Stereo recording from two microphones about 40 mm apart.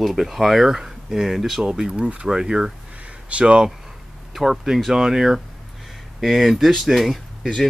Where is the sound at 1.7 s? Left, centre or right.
Centre.